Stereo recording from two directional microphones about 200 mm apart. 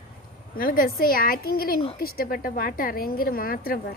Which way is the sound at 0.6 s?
45° left (ahead or behind).